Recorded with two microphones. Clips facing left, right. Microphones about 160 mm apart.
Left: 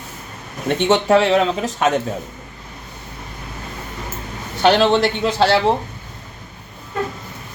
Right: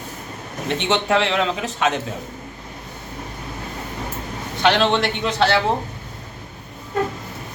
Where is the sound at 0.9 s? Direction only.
35° left (ahead or behind).